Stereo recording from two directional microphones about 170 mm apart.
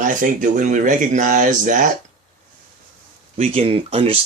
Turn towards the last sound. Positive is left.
turn(degrees=-35)  # may be behind; listen again after turning